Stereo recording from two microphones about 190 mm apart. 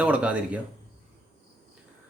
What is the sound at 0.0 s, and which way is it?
Speech, 5° right (ahead or behind).